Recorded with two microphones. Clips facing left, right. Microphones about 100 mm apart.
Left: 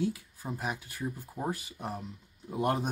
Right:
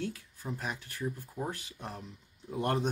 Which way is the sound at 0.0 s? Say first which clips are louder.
Left 5 dB; 10° left (ahead or behind).